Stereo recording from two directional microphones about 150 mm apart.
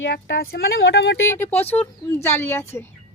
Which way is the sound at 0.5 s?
90° left.